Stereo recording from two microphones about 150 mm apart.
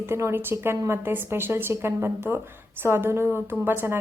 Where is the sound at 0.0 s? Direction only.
15° right (ahead or behind).